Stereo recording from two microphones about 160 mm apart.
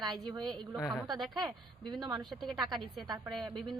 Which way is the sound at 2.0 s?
25° right (ahead or behind).